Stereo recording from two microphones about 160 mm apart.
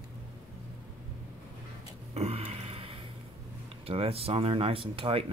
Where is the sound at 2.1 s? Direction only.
40° right (ahead or behind).